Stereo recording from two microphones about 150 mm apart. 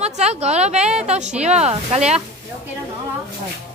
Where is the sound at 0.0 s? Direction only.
45° right (ahead or behind).